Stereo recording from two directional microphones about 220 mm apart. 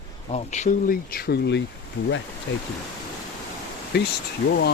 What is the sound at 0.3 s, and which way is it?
Speech, 30° left (ahead or behind).